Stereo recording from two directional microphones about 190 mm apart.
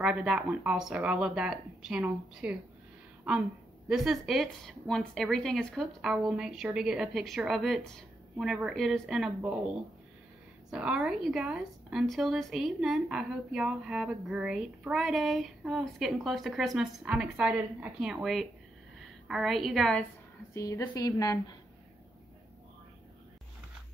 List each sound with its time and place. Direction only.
0.0 s a woman's voice: 5° right (ahead or behind)
3.9 s a woman's voice: centre (ahead or behind)
10.7 s a woman's voice: 5° right (ahead or behind)
20.5 s a woman's voice: 15° left (ahead or behind)